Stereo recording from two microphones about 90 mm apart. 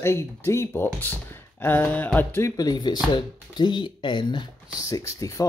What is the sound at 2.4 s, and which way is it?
Speech, 45° left (ahead or behind).